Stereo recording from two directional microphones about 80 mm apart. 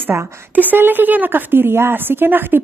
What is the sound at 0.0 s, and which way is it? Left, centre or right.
A woman's voice, right.